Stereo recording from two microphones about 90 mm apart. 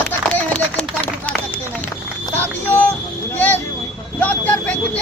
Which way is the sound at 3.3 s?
20° left (ahead or behind).